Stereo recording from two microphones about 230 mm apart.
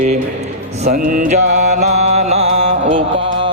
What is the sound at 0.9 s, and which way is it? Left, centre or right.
Mantra, right.